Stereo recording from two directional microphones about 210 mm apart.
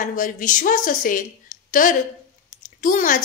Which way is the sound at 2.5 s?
40° left (ahead or behind).